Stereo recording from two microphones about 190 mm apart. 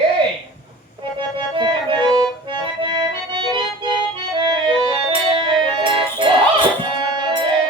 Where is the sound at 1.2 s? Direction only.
25° right (ahead or behind).